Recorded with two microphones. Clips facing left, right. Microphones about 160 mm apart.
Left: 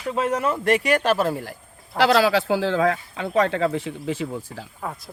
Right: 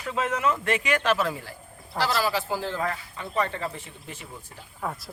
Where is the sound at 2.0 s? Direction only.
75° left (ahead or behind).